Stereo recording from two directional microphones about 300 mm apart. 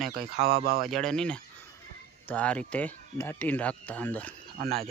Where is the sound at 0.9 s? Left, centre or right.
Centre.